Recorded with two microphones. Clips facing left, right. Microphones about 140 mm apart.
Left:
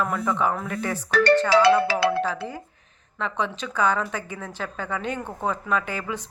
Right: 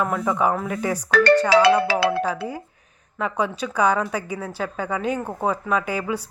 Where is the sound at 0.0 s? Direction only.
5° right (ahead or behind).